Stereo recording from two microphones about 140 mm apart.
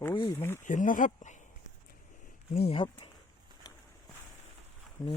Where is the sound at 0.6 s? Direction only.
65° left (ahead or behind).